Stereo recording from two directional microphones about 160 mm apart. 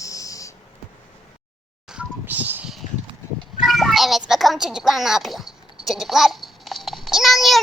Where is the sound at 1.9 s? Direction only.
10° right (ahead or behind).